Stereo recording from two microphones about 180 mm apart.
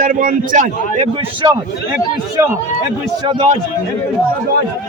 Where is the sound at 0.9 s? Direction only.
35° right (ahead or behind).